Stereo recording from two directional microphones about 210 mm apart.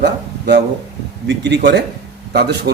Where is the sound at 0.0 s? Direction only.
55° right (ahead or behind).